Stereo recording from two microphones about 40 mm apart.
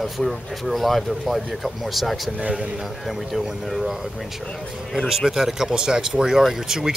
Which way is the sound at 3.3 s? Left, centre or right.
Centre.